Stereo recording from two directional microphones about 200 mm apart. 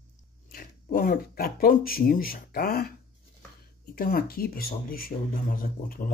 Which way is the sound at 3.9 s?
50° left (ahead or behind).